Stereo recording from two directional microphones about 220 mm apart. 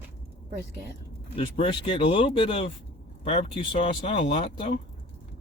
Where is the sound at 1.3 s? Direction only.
25° left (ahead or behind).